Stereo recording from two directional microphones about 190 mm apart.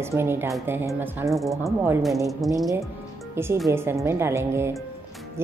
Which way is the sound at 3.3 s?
15° right (ahead or behind).